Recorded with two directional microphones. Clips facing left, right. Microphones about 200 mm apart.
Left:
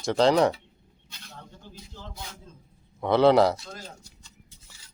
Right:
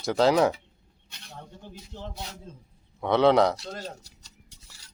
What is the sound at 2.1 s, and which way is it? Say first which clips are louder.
Speech: right 3 dB; 40° right (ahead or behind).